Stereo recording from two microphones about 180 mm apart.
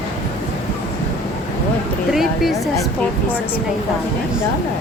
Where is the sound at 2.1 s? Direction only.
Centre (ahead or behind).